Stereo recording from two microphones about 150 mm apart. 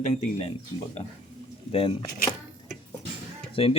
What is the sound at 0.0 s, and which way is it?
Speech, 55° left (ahead or behind).